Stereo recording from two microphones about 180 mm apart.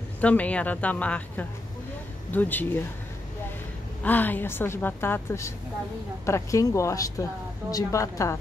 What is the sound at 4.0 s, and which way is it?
A woman's voice, 10° left (ahead or behind).